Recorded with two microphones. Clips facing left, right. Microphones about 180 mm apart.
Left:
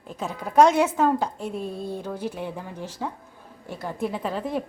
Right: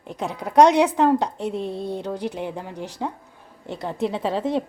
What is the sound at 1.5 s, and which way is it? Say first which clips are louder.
Speech: right 3 dB; 25° right (ahead or behind).